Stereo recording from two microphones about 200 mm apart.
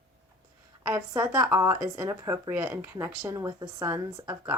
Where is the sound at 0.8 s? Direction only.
20° right (ahead or behind).